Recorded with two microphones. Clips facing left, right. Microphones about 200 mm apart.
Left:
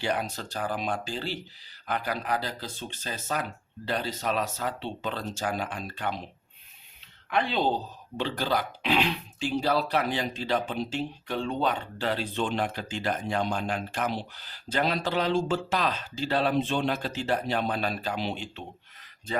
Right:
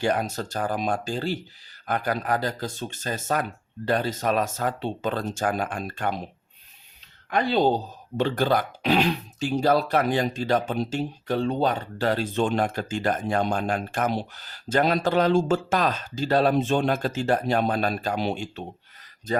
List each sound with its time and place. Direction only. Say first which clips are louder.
0.0 s speech: right 5 dB; 45° right (ahead or behind)
7.3 s speech: right 5 dB; 40° right (ahead or behind)